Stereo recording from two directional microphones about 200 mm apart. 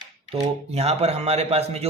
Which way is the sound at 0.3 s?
30° right (ahead or behind).